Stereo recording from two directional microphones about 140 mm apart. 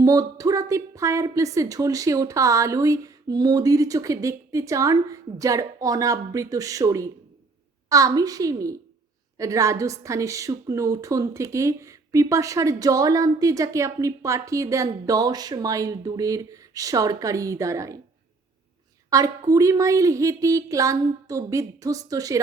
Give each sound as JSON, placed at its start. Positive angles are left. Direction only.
{"t": 0.0, "sound": "a woman's voice", "side_deg": -25}
{"t": 19.1, "sound": "a woman's voice", "side_deg": -25}